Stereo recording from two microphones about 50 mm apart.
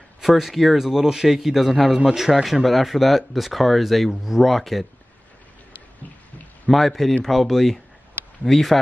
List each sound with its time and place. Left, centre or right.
0.2 s speech: centre
2.0 s speech: centre
6.7 s speech: centre